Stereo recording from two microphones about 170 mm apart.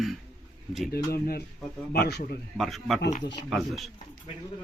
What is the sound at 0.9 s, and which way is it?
A man's voice, 65° left (ahead or behind).